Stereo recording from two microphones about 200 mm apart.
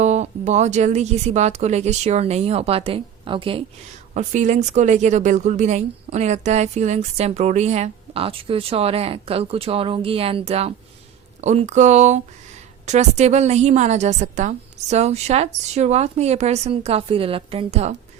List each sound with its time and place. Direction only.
0.0 s speech: 35° right (ahead or behind)
4.1 s speech: 35° right (ahead or behind)